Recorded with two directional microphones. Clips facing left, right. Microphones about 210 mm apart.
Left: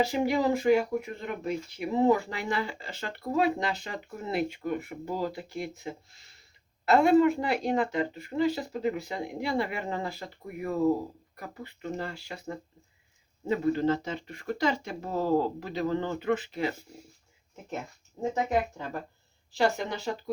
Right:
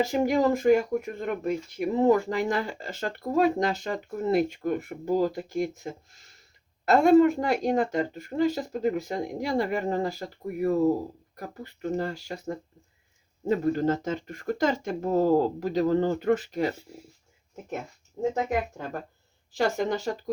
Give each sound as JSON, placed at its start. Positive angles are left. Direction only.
{"t": 0.0, "sound": "speech", "side_deg": -45}
{"t": 19.5, "sound": "speech", "side_deg": -50}